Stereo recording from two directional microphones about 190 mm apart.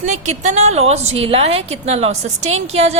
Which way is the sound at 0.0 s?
40° right (ahead or behind).